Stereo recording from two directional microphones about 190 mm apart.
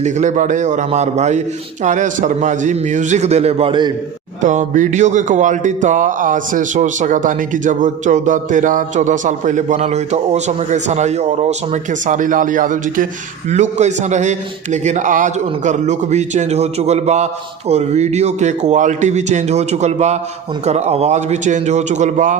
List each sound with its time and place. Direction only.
0.0 s music: 40° right (ahead or behind)
4.4 s music: 40° right (ahead or behind)